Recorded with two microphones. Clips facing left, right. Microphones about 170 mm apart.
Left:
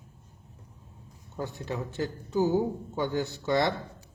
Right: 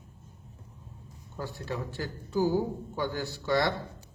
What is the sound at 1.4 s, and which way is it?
A man's voice, 20° left (ahead or behind).